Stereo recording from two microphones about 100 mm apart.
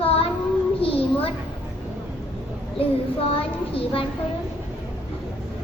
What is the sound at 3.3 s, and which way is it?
Speech, 70° left (ahead or behind).